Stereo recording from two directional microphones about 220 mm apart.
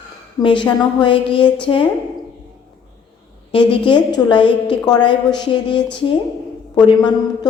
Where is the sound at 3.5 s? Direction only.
25° left (ahead or behind).